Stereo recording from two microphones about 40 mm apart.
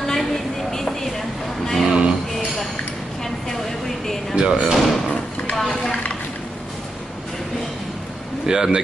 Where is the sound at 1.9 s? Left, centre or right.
Right.